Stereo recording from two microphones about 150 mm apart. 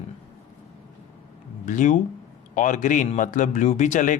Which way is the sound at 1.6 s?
55° left (ahead or behind).